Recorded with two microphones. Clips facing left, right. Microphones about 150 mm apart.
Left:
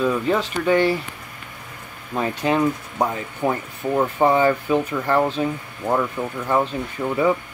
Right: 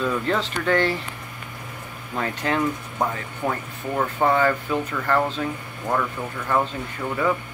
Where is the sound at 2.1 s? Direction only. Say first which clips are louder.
Left 4 dB; 15° left (ahead or behind).